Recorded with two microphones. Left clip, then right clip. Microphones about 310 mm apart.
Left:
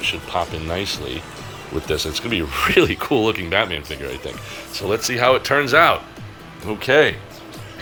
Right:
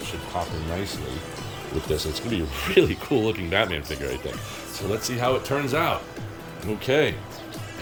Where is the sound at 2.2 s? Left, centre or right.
Centre.